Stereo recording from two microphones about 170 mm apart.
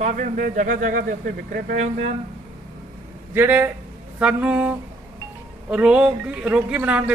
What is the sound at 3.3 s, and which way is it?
A man's voice, 10° right (ahead or behind).